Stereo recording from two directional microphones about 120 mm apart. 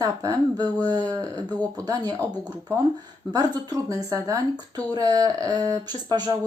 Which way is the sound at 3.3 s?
35° right (ahead or behind).